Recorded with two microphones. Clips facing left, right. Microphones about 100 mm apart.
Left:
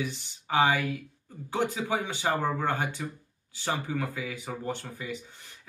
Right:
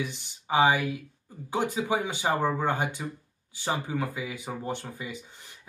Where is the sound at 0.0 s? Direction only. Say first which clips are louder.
Even; 15° right (ahead or behind).